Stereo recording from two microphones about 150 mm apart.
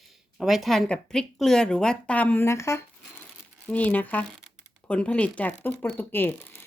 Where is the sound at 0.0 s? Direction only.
Centre (ahead or behind).